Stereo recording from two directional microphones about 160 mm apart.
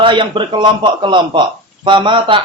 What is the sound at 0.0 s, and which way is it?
A man's voice, 30° right (ahead or behind).